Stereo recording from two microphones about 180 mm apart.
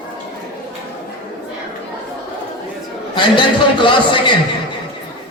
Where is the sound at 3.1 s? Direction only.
25° left (ahead or behind).